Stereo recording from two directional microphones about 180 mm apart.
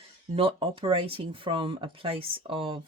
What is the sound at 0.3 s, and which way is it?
Speech, 30° right (ahead or behind).